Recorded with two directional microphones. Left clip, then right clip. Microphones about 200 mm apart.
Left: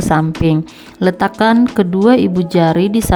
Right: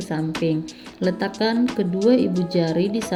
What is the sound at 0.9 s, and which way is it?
Speech, 55° left (ahead or behind).